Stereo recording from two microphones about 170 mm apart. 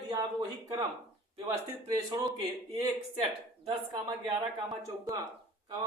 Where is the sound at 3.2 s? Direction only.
35° right (ahead or behind).